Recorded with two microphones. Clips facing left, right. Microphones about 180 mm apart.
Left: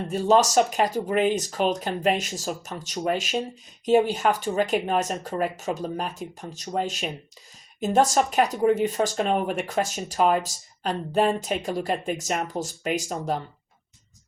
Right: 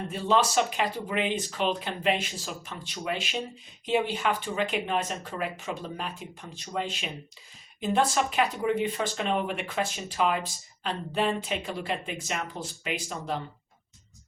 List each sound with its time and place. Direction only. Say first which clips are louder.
0.1 s speech: left 6 dB; 45° left (ahead or behind)